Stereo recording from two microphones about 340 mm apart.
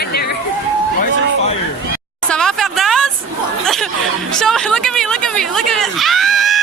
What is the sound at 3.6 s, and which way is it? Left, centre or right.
Chatter, centre.